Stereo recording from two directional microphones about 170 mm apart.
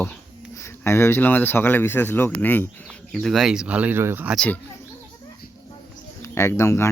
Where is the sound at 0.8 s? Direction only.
15° left (ahead or behind); by 4.3 s 15° right (ahead or behind).